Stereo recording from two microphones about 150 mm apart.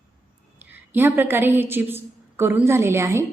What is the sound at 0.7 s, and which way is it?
A woman's voice, 15° right (ahead or behind).